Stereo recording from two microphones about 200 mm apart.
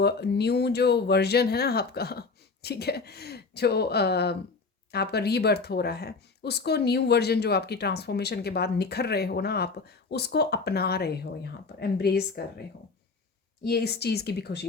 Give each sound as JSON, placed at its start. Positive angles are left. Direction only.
{"t": 0.0, "sound": "speech", "side_deg": 55}
{"t": 13.7, "sound": "speech", "side_deg": 55}